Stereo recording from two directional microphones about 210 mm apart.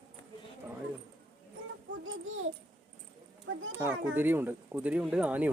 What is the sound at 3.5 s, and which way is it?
Children playing, 70° right (ahead or behind).